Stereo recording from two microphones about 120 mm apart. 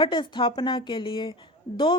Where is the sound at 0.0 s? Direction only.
40° left (ahead or behind).